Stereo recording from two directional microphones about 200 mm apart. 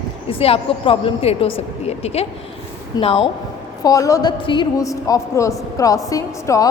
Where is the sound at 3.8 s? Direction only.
15° left (ahead or behind).